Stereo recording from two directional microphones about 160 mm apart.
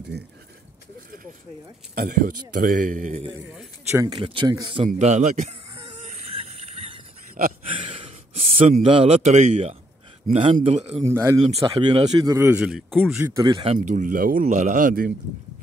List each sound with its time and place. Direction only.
2.0 s speech: 65° right (ahead or behind)
3.9 s speech: 20° right (ahead or behind)
4.2 s speech: 30° right (ahead or behind)
4.8 s speech: 50° right (ahead or behind)
5.8 s a sound: 35° right (ahead or behind)
8.8 s speech: 35° right (ahead or behind)
12.2 s a man's voice: 20° right (ahead or behind); by 13.2 s centre (ahead or behind)
13.2 s speech: 20° right (ahead or behind)
13.7 s speech: 55° right (ahead or behind)